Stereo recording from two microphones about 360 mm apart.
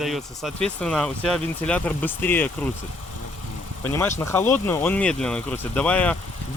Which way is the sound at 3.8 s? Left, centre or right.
Centre.